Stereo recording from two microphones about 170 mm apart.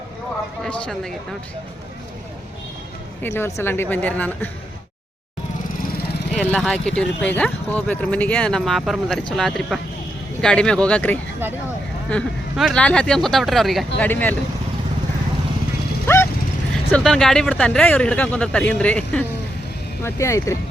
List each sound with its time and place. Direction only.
3.2 s speech: 15° left (ahead or behind)
6.3 s speech: 5° left (ahead or behind)
16.1 s horse: 15° left (ahead or behind)
16.9 s speech: 5° left (ahead or behind)